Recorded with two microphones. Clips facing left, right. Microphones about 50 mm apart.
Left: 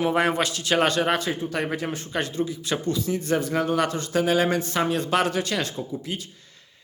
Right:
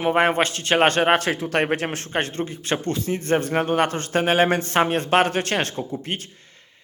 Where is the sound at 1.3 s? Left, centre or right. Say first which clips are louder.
Right 5 dB; right.